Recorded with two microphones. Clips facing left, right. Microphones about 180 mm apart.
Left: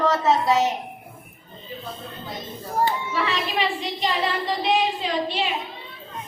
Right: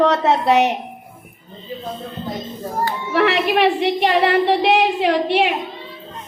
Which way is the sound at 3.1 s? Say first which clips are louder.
Right 9 dB; 65° right (ahead or behind).